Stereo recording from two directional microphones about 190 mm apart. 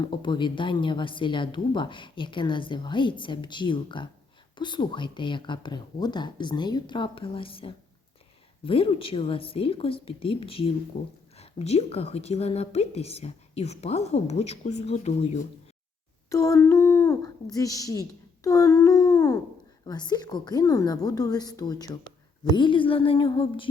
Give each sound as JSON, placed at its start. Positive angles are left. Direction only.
{"t": 0.0, "sound": "a woman's voice", "side_deg": 25}
{"t": 16.3, "sound": "a sound", "side_deg": 15}
{"t": 19.9, "sound": "a woman's voice", "side_deg": 20}